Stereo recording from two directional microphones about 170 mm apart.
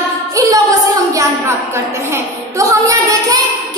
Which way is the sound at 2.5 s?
20° right (ahead or behind).